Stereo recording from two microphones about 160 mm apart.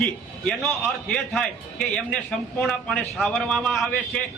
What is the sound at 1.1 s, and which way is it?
A man's voice, 5° left (ahead or behind).